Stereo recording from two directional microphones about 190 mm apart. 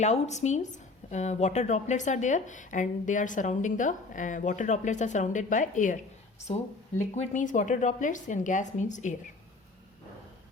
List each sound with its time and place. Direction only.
0.0 s speech: 35° left (ahead or behind)
7.2 s speech: 40° left (ahead or behind)